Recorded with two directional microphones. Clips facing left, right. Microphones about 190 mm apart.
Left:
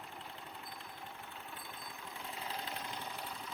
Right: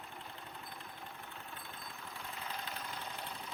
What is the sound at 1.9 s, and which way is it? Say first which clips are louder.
Jackhammer: left 2 dB; 15° left (ahead or behind).